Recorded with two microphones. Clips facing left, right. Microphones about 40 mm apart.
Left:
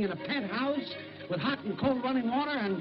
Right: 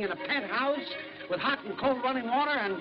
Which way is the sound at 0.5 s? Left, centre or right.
Right.